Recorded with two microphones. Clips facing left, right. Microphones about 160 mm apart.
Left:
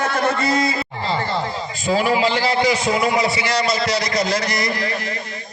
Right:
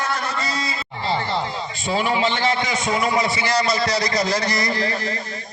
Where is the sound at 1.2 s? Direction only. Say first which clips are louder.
Left 1 dB; 20° right (ahead or behind).